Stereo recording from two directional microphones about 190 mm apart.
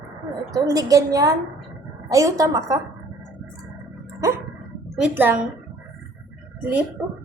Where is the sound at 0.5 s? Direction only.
20° right (ahead or behind).